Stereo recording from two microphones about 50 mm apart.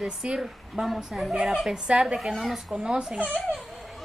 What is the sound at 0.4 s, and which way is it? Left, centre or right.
Speech, centre.